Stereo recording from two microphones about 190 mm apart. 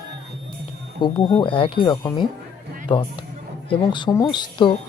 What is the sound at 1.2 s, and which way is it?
Speech, 25° left (ahead or behind).